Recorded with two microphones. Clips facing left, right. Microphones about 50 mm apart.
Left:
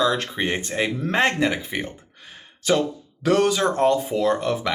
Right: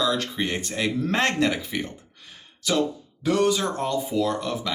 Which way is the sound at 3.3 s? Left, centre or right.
Left.